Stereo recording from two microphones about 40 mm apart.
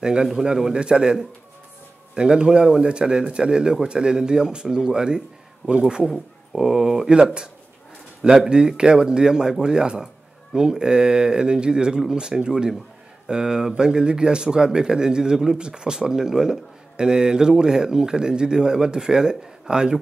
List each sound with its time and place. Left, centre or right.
0.0 s a man's voice: centre
2.1 s speech: right
6.0 s a man's voice: centre